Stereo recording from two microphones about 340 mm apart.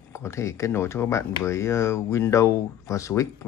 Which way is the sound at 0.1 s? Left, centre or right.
Centre.